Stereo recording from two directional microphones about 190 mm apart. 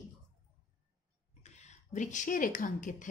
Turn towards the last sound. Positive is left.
turn(degrees=40)  # may be behind; listen again after turning